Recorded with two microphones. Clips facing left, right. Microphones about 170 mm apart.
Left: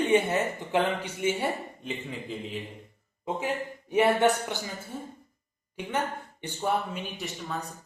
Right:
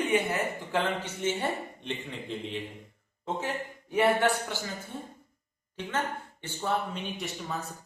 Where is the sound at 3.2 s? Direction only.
15° left (ahead or behind).